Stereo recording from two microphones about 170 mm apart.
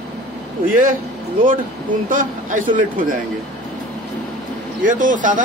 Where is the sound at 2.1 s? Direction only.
50° right (ahead or behind).